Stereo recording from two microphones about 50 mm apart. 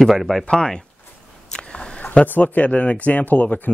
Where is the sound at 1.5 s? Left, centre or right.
Centre.